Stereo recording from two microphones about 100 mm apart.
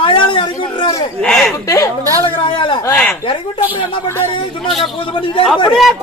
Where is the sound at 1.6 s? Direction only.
30° left (ahead or behind).